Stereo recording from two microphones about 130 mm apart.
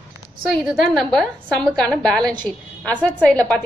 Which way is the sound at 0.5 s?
Centre (ahead or behind).